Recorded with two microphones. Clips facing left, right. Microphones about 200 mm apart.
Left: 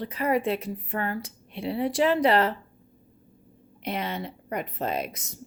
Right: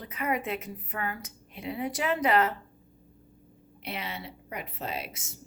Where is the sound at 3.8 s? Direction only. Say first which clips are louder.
Left 7 dB; 5° right (ahead or behind).